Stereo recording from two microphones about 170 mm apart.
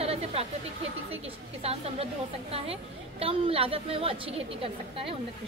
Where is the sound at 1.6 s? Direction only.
35° right (ahead or behind).